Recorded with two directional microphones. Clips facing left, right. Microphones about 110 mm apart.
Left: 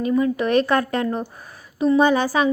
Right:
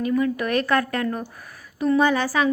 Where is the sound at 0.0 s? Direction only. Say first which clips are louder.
Left 2 dB; 25° left (ahead or behind).